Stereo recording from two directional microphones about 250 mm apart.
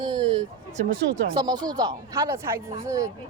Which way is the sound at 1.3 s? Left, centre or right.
Centre.